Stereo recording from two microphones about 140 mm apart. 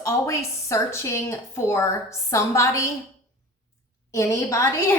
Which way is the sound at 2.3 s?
20° left (ahead or behind).